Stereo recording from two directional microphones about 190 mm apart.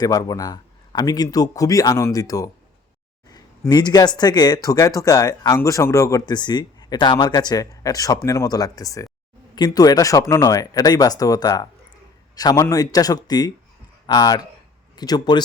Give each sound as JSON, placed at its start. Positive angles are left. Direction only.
{"t": 0.0, "sound": "speech", "side_deg": 20}